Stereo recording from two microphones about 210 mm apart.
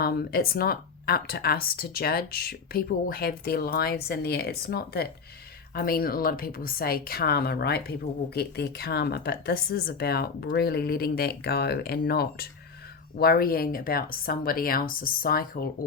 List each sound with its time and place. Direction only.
0.0 s a woman's voice: 45° left (ahead or behind)